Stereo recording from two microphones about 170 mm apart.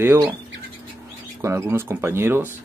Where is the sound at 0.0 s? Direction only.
15° right (ahead or behind).